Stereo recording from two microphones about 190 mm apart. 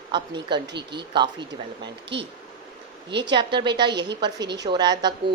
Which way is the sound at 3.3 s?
25° right (ahead or behind).